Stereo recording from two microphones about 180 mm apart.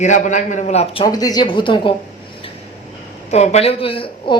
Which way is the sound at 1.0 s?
20° left (ahead or behind).